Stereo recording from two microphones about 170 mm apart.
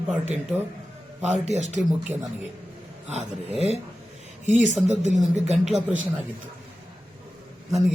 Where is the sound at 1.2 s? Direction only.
45° right (ahead or behind).